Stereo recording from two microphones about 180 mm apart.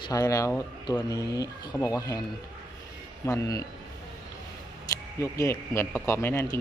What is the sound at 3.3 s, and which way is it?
Speech, 15° left (ahead or behind).